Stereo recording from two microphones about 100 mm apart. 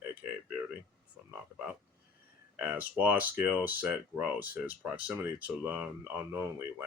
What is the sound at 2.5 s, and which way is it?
Speech, 15° right (ahead or behind).